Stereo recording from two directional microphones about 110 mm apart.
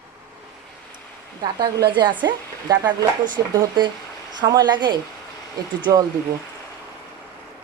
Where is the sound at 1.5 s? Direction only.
40° right (ahead or behind).